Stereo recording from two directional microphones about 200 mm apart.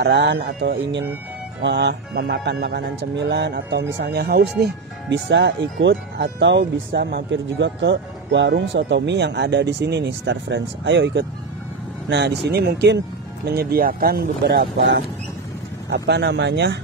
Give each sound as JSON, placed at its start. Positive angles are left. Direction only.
{"t": 0.0, "sound": "speech", "side_deg": -60}